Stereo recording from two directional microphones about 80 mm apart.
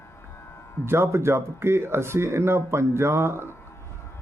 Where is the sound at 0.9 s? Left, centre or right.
Right.